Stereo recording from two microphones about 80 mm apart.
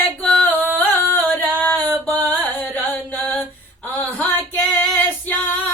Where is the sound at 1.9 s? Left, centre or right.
Left.